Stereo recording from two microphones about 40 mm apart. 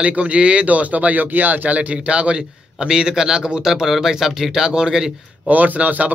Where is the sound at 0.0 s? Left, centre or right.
Right.